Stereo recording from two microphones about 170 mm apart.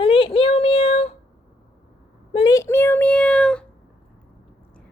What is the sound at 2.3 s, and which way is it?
Speech, 25° left (ahead or behind).